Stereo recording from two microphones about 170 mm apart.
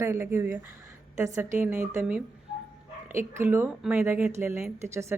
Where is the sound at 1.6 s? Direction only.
10° right (ahead or behind).